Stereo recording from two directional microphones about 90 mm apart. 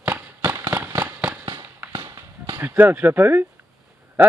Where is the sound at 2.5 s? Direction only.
25° right (ahead or behind).